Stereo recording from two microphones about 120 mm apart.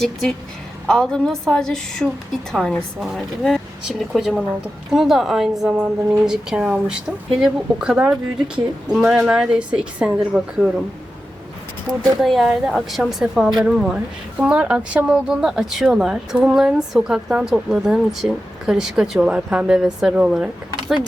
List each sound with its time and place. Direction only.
0.0 s a woman's voice: centre (ahead or behind)
12.2 s a woman's voice: centre (ahead or behind)